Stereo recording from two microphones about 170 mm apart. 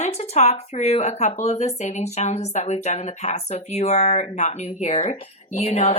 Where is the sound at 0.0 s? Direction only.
40° left (ahead or behind).